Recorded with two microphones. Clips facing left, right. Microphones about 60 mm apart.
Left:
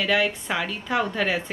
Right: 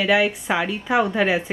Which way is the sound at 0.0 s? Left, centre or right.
Centre.